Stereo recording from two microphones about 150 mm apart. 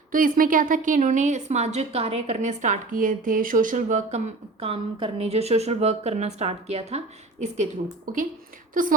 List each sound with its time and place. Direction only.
0.1 s a woman's voice: 65° right (ahead or behind)
4.6 s speech: 40° right (ahead or behind)
7.4 s a woman's voice: 55° right (ahead or behind)